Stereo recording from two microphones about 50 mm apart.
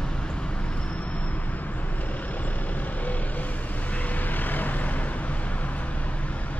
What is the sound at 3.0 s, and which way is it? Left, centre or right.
Vehicle, left.